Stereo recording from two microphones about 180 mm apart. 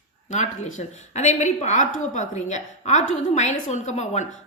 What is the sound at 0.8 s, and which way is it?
A woman's voice, 40° left (ahead or behind).